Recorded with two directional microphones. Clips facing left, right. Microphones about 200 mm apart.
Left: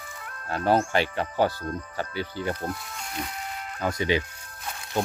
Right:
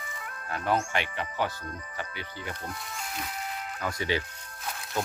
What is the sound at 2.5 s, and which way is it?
Music, centre (ahead or behind).